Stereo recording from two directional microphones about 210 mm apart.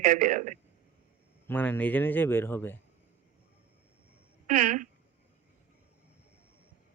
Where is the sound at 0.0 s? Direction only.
40° right (ahead or behind).